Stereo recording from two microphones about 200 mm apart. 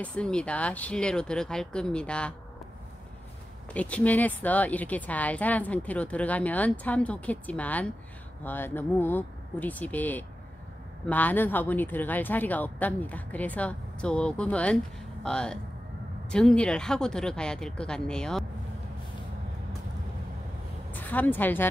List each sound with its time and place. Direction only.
0.0 s speech: 5° left (ahead or behind)
3.7 s speech: 5° left (ahead or behind)
20.9 s speech: 10° left (ahead or behind)